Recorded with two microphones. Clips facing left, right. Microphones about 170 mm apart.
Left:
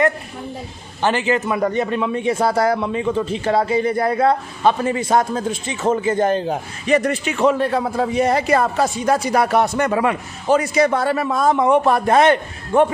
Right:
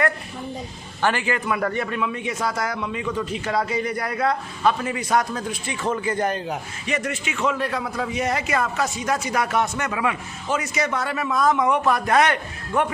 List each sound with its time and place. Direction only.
1.0 s a man's voice: 20° left (ahead or behind)